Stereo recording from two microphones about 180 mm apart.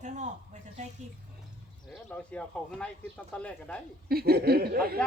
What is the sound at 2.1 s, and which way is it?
Speech, 5° left (ahead or behind).